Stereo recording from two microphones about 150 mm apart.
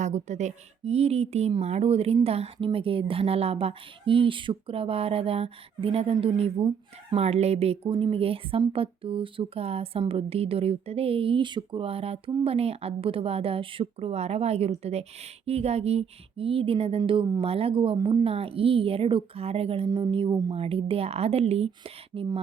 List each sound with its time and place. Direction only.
0.0 s a woman's voice: 50° right (ahead or behind)